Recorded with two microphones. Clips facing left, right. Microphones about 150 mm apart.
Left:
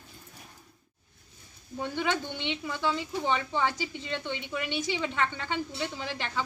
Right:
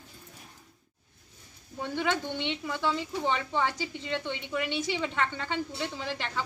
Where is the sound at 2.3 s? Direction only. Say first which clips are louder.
Right 1 dB; 20° left (ahead or behind).